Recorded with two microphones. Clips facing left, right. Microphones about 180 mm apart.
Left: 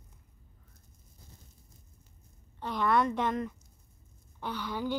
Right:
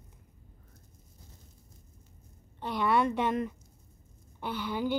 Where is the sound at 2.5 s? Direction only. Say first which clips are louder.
Even; 10° right (ahead or behind).